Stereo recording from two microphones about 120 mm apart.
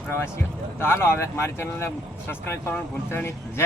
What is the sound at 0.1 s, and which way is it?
Speech, 20° left (ahead or behind).